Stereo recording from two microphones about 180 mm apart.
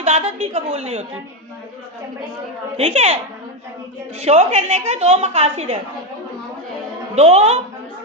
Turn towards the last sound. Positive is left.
turn(degrees=-35)  # may be behind; listen again after turning